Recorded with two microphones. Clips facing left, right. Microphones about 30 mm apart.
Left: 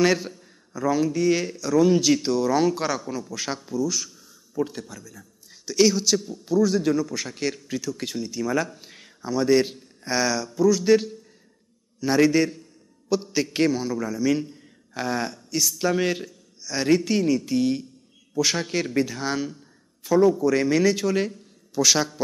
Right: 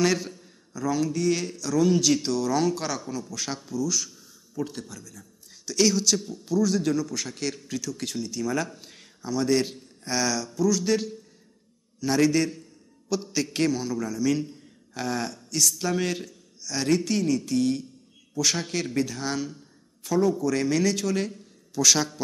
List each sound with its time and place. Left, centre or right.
0.0 s a man's voice: centre